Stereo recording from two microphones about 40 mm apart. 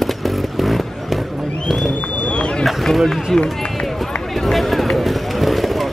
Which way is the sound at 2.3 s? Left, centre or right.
Left.